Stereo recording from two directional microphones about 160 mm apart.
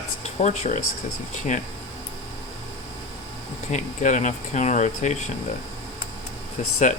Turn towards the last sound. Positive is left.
turn(degrees=50)  # may be behind; listen again after turning